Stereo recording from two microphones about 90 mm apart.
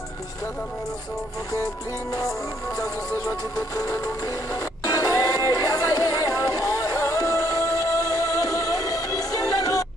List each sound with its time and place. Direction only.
3.3 s music: 35° left (ahead or behind)